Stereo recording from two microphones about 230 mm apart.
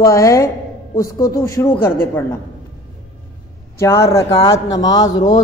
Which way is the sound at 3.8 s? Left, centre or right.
Centre.